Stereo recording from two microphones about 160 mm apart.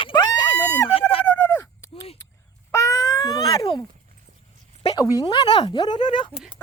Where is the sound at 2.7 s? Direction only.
20° left (ahead or behind).